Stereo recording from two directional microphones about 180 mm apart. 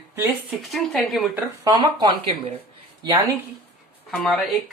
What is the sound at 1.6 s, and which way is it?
Speech, 25° right (ahead or behind).